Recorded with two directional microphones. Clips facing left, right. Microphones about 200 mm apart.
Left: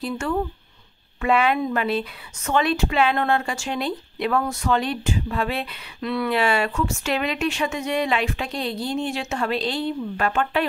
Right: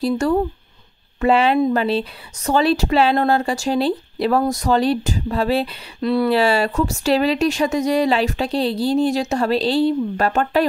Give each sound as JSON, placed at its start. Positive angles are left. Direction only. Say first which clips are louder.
{"t": 0.0, "sound": "speech", "louder": "right 7 dB", "side_deg": -35}